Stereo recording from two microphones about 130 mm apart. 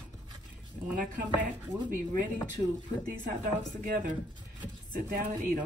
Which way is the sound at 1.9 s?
90° right.